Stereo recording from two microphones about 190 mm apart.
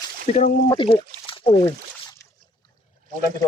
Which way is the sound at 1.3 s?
30° left (ahead or behind).